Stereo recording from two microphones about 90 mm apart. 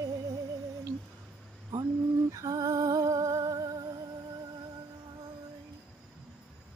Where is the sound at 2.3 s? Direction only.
40° right (ahead or behind).